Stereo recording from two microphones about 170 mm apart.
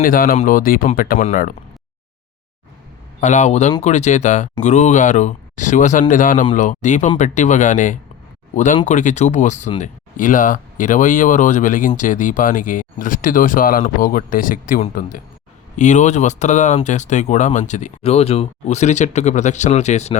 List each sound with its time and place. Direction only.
0.0 s speech: 55° left (ahead or behind)
3.2 s speech: 45° left (ahead or behind)